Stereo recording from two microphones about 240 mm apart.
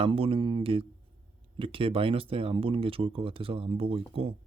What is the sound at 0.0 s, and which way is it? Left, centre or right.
Speech, right.